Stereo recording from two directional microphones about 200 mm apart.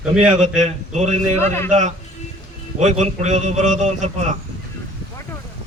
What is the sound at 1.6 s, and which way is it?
A man's voice, 35° right (ahead or behind).